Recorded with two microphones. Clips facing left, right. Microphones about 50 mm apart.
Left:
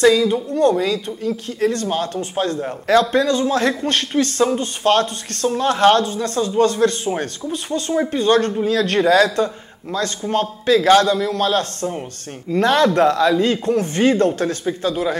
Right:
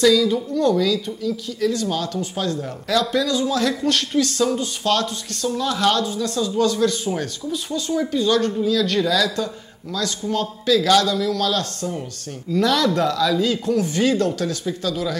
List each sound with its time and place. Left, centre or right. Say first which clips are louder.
0.0 s speech: left 2 dB; left